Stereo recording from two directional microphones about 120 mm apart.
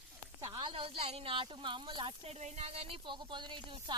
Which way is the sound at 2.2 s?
60° right (ahead or behind).